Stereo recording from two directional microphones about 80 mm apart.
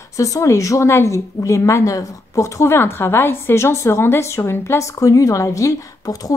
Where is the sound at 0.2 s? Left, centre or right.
Left.